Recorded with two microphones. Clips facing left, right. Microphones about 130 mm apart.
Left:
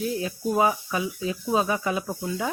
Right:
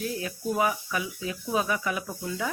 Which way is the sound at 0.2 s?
25° left (ahead or behind).